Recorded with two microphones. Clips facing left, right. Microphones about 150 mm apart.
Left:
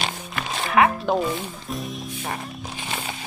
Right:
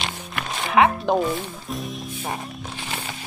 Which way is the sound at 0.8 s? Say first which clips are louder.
Right 1 dB; 10° right (ahead or behind).